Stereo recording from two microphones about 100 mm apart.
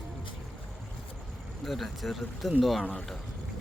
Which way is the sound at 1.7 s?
Centre (ahead or behind).